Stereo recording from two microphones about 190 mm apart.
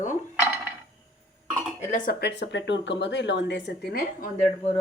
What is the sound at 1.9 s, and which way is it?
Speech, 45° left (ahead or behind).